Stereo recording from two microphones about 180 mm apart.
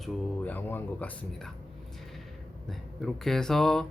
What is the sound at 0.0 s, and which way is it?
Speech, 10° left (ahead or behind).